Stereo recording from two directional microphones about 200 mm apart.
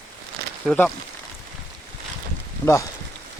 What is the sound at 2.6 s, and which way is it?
Speech, 15° left (ahead or behind).